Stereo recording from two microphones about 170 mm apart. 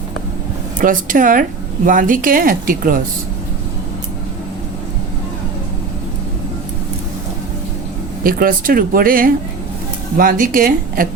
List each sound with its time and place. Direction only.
0.8 s speech: 50° right (ahead or behind)
8.2 s speech: 55° right (ahead or behind)